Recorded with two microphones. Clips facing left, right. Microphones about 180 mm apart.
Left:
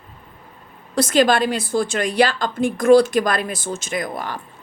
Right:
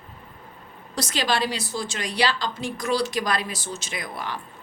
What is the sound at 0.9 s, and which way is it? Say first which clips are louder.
A woman's voice: left 9 dB; 50° left (ahead or behind).